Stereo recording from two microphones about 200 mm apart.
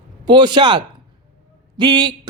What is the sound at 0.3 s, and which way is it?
Speech, 20° right (ahead or behind).